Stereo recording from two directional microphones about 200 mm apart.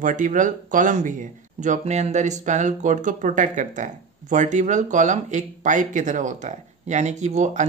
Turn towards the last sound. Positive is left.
turn(degrees=-35)  # may be behind; listen again after turning